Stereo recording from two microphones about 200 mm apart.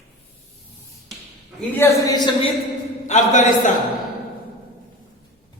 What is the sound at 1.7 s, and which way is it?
Speech, 15° left (ahead or behind).